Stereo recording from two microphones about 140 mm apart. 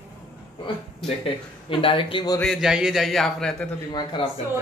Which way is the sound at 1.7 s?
40° left (ahead or behind).